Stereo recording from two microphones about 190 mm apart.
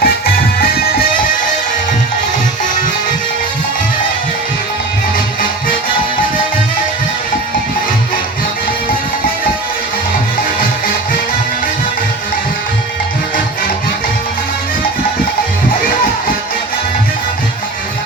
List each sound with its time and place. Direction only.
0.0 s music: 50° left (ahead or behind)